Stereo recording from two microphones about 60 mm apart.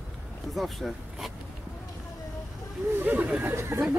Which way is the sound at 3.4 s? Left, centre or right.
Right.